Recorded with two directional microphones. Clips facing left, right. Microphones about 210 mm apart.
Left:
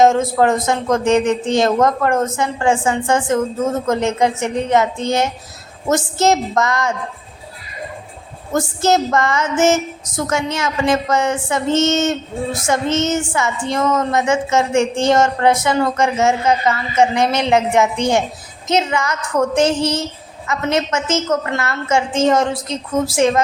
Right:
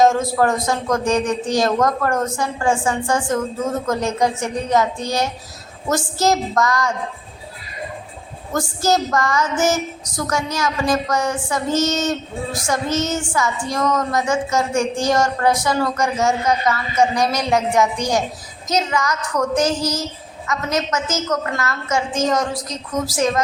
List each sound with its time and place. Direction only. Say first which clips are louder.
0.0 s speech: left 3 dB; 25° left (ahead or behind)
8.5 s speech: left 3 dB; 25° left (ahead or behind)